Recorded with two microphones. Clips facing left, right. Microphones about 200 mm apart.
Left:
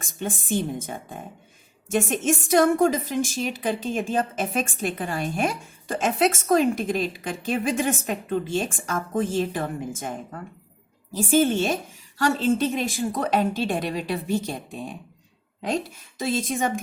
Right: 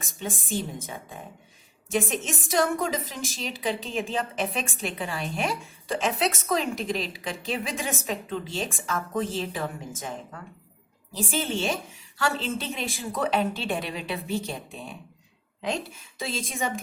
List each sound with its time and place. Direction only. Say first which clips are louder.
0.0 s a woman's voice: left 4 dB; 50° left (ahead or behind)
16.2 s a woman's voice: left 6 dB; 50° left (ahead or behind)